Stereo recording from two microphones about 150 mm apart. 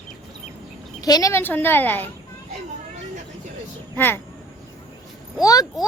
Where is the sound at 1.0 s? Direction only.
25° left (ahead or behind).